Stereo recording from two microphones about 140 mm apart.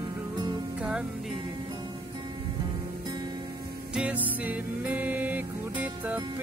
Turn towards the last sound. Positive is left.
turn(degrees=-10)  # may be behind; listen again after turning